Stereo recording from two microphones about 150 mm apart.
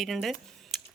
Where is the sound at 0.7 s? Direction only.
Centre (ahead or behind).